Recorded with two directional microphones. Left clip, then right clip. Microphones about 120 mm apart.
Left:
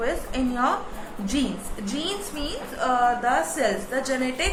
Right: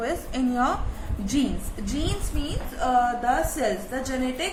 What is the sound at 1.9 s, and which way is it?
Speech, 15° right (ahead or behind).